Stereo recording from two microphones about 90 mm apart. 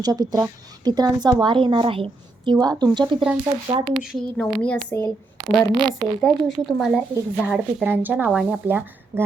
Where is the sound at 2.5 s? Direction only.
50° right (ahead or behind).